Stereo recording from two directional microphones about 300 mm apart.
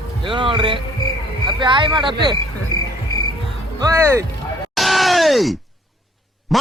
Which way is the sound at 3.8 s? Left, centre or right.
Centre.